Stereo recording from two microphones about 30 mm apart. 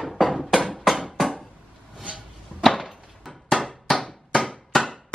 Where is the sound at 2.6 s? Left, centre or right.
Centre.